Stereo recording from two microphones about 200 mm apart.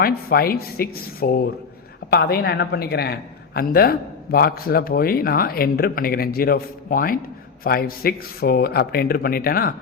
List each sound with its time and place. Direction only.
0.0 s a woman's voice: 50° left (ahead or behind)